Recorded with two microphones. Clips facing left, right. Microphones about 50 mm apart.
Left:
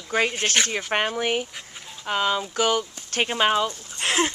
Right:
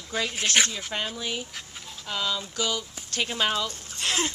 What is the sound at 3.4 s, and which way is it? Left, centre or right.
Speech, left.